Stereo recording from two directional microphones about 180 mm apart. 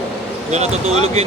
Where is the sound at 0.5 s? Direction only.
35° right (ahead or behind).